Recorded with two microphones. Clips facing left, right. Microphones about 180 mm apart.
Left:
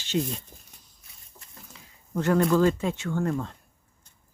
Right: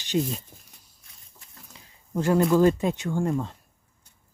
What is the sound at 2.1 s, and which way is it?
Speech, 10° right (ahead or behind).